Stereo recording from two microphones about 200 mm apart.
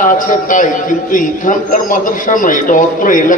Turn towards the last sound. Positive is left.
turn(degrees=40)  # may be behind; listen again after turning